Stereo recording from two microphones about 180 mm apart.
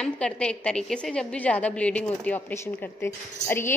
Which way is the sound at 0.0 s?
5° left (ahead or behind).